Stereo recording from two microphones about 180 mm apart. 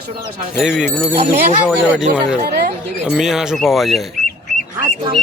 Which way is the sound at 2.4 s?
55° right (ahead or behind).